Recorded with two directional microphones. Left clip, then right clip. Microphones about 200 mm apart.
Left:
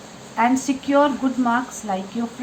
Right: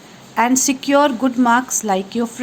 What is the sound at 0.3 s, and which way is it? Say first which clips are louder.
A woman's voice: right 3 dB; 60° right (ahead or behind).